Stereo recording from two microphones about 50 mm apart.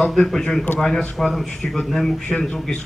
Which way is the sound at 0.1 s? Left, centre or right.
Centre.